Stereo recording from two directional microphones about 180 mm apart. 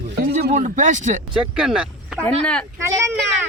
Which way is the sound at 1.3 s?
5° right (ahead or behind).